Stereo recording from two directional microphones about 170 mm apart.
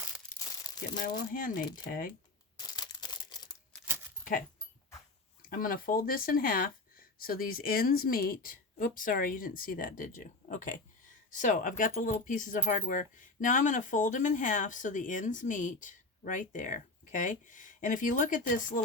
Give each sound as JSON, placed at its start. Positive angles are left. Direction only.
{"t": 1.3, "sound": "speech", "side_deg": 55}
{"t": 2.6, "sound": "a sound", "side_deg": 25}
{"t": 4.2, "sound": "keys jangling", "side_deg": 55}
{"t": 5.5, "sound": "speech", "side_deg": 55}